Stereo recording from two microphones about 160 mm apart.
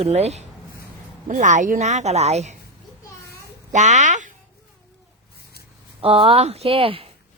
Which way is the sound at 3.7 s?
50° right (ahead or behind).